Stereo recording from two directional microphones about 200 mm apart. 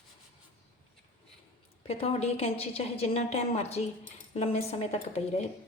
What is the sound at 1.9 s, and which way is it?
A woman's voice, 30° left (ahead or behind).